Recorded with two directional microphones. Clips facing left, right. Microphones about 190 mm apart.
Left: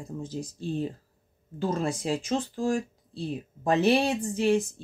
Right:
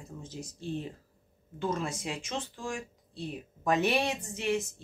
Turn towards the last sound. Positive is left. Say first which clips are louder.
# left 7 dB
turn(degrees=35)  # may be behind; listen again after turning